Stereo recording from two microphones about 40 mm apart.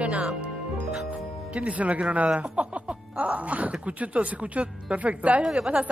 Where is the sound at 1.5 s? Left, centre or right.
Right.